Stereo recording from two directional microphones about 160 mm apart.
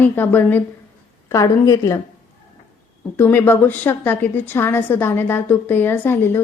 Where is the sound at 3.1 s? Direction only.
15° left (ahead or behind).